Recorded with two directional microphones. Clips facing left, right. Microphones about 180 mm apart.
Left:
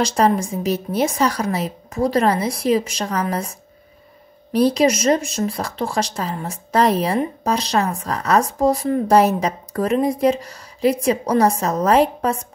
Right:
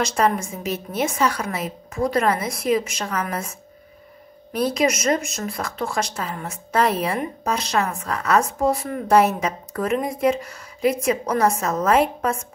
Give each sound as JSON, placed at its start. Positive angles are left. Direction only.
{"t": 0.0, "sound": "speech", "side_deg": 35}